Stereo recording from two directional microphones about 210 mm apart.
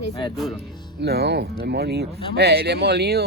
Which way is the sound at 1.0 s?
50° right (ahead or behind).